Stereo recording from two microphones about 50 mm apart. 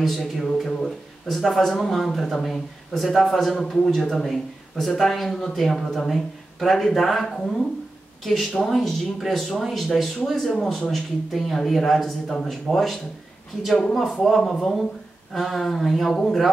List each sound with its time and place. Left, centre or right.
0.0 s a man's voice: centre
14.2 s a man's voice: centre